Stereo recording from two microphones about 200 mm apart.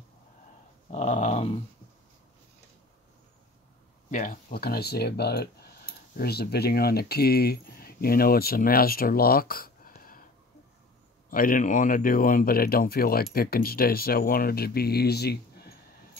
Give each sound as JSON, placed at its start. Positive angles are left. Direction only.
{"t": 0.8, "sound": "dog", "side_deg": 35}
{"t": 4.1, "sound": "speech", "side_deg": 40}
{"t": 11.2, "sound": "speech", "side_deg": 45}